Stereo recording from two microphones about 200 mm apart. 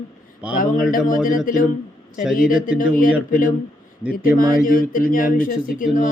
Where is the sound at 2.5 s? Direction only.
5° right (ahead or behind).